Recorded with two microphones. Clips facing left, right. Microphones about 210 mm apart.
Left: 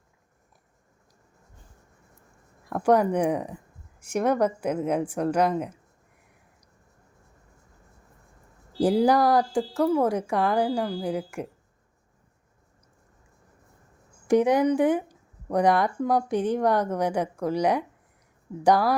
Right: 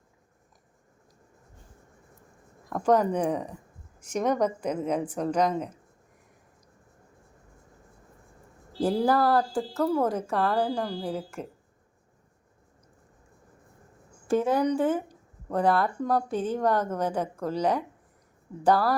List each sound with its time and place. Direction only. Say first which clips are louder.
2.6 s speech: left 2 dB; 10° left (ahead or behind)
8.8 s speech: left 3 dB; 15° left (ahead or behind)
14.3 s speech: left 4 dB; 15° left (ahead or behind)